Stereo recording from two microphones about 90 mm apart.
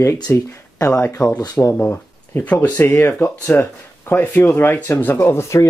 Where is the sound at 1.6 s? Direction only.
25° left (ahead or behind).